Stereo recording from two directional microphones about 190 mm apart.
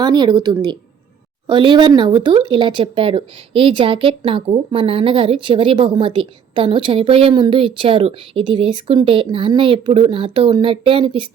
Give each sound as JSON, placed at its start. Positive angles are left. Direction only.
{"t": 0.0, "sound": "speech", "side_deg": -20}